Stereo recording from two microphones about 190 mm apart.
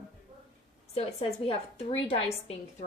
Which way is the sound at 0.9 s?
30° left (ahead or behind).